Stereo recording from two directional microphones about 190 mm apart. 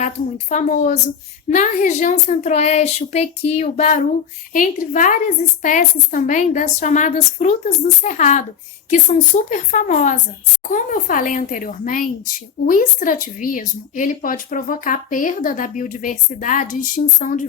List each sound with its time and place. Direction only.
0.5 s a woman's voice: 40° left (ahead or behind)